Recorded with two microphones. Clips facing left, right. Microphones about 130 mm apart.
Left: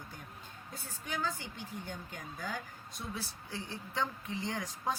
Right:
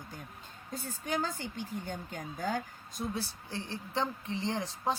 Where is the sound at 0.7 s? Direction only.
45° right (ahead or behind).